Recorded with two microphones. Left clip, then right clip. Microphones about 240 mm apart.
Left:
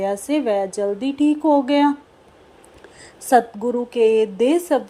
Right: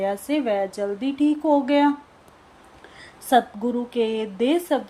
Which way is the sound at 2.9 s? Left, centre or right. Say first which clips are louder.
Left 3 dB; centre.